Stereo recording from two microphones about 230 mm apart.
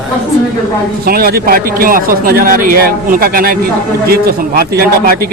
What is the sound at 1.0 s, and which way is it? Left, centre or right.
A man's voice, right.